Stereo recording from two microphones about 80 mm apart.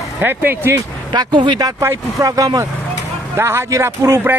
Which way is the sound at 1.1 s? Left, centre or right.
Right.